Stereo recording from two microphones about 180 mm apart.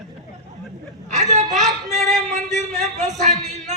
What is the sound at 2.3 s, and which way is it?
Speech, 40° right (ahead or behind).